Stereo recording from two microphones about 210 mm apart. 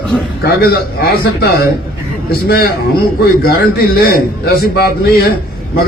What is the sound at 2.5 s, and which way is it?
A man's voice, 45° left (ahead or behind).